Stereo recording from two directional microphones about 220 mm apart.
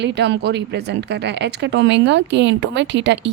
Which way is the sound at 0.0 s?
50° right (ahead or behind).